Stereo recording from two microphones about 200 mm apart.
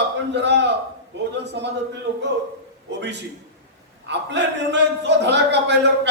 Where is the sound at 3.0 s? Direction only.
60° right (ahead or behind).